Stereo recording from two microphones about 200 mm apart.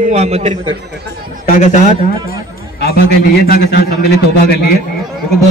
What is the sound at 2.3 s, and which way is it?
A man's voice, 50° left (ahead or behind).